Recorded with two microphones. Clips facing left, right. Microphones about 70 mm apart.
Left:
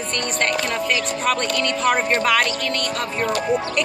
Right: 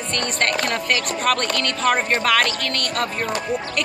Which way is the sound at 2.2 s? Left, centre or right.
Centre.